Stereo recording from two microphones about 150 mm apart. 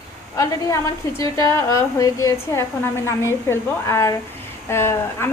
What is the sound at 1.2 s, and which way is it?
A woman's voice, 20° left (ahead or behind).